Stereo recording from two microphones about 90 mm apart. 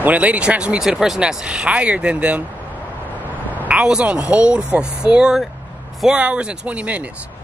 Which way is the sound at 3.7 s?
10° right (ahead or behind).